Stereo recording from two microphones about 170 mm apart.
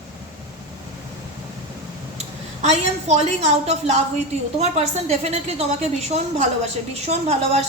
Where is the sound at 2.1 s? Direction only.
40° right (ahead or behind).